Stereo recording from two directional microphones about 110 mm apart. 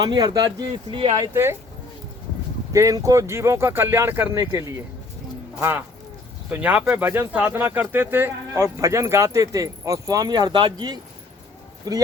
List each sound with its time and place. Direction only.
0.0 s speech: 40° right (ahead or behind)
1.3 s speech: 25° right (ahead or behind)
2.7 s speech: 30° right (ahead or behind)
5.5 s speech: 15° right (ahead or behind); by 12.0 s 35° right (ahead or behind)